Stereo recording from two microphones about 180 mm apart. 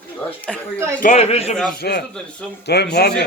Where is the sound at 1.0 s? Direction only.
45° left (ahead or behind).